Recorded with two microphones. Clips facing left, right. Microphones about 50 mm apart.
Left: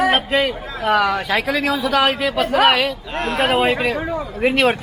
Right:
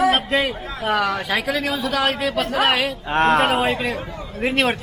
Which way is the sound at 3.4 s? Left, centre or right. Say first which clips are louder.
Left 2 dB; centre.